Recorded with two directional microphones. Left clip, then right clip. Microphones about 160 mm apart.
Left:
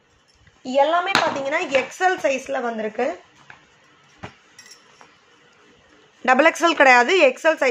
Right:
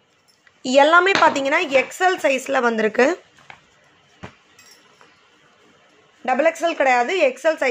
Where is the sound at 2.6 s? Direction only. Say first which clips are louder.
Right 7 dB; 80° right.